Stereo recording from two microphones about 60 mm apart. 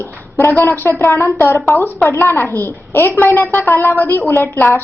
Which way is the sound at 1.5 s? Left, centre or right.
Left.